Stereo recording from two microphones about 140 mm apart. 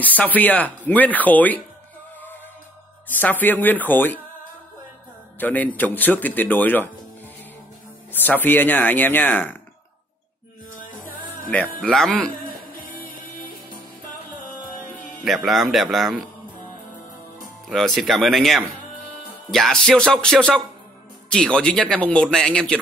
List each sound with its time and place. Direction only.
0.0 s speech: 10° left (ahead or behind)
3.1 s speech: 10° left (ahead or behind)
5.4 s speech: 10° left (ahead or behind)
8.1 s speech: 15° left (ahead or behind)
10.8 s music: 75° left (ahead or behind)
11.8 s music: 5° left (ahead or behind)
15.2 s music: centre (ahead or behind)
17.6 s music: centre (ahead or behind)
21.3 s speech: 5° left (ahead or behind)